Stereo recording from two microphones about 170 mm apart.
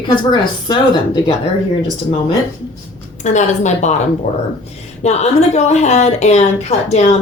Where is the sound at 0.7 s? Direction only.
30° left (ahead or behind).